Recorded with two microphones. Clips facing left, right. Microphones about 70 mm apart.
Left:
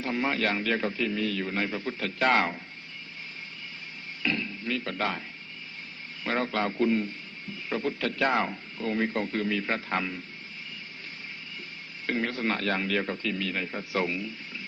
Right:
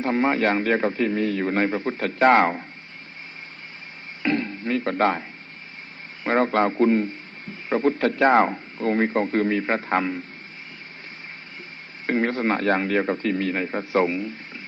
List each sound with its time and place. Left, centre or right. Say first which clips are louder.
0.0 s a man's voice: right 7 dB; right
4.2 s a sound: right 7 dB; right
6.2 s a man's voice: right 8 dB; right
12.0 s a man's voice: right 7 dB; right